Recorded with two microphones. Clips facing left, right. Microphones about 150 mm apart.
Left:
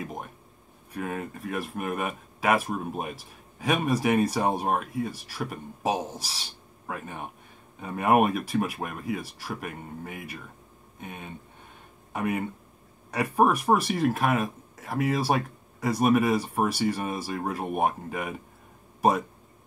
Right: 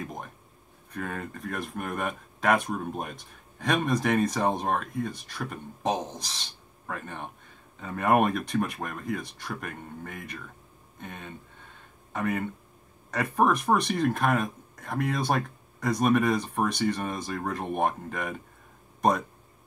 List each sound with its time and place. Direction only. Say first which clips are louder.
0.0 s speech: left 1 dB; 5° left (ahead or behind)